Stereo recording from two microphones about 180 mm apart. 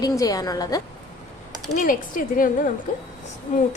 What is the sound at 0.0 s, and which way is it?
Speech, 20° left (ahead or behind).